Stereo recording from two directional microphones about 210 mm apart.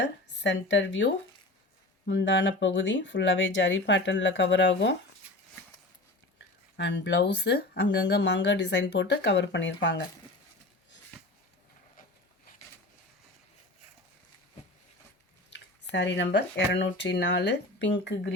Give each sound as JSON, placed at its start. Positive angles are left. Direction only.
{"t": 0.0, "sound": "speech", "side_deg": 55}
{"t": 6.7, "sound": "speech", "side_deg": 55}
{"t": 15.5, "sound": "speech", "side_deg": 55}